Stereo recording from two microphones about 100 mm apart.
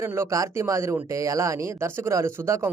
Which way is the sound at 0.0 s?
25° right (ahead or behind).